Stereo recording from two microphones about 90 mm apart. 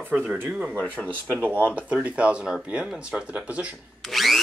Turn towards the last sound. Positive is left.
turn(degrees=0)  # may be behind; listen again after turning